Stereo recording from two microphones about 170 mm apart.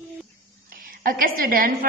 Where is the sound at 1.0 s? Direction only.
55° right (ahead or behind).